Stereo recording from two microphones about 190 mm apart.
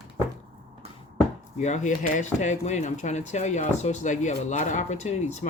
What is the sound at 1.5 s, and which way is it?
Speech, 40° left (ahead or behind).